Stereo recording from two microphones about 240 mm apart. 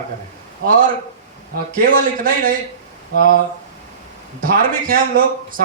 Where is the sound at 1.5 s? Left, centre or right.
Right.